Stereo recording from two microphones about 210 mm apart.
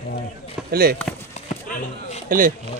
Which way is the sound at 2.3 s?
40° right (ahead or behind).